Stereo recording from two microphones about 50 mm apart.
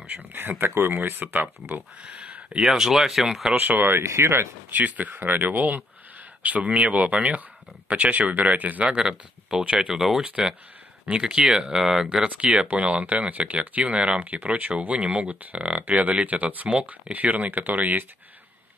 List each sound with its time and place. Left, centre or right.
0.1 s speech: right
1.2 s speech: right
2.0 s a sound: right
2.5 s speech: centre
3.5 s speech: right
3.9 s speech: right
4.6 s speech: right
8.8 s speech: centre
10.2 s speech: centre
12.1 s speech: right
15.8 s speech: right